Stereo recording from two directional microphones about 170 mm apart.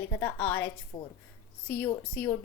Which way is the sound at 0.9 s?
25° left (ahead or behind).